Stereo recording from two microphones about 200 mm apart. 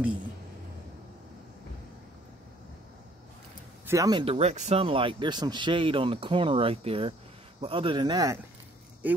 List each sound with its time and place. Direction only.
3.8 s speech: 15° right (ahead or behind)
9.0 s speech: 10° right (ahead or behind)